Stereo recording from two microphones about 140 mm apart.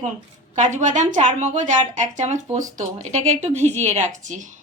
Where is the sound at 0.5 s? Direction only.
55° right (ahead or behind).